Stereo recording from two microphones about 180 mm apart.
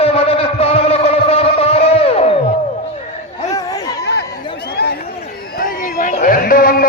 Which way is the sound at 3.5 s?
20° left (ahead or behind).